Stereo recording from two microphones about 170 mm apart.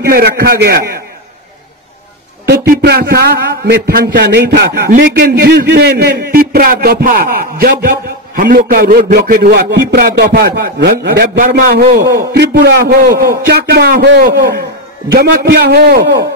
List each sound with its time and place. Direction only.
0.0 s a man's voice: 65° right (ahead or behind)
2.4 s a man's voice: 75° right (ahead or behind)
12.0 s a man's voice: 20° right (ahead or behind)
12.3 s a man's voice: 80° right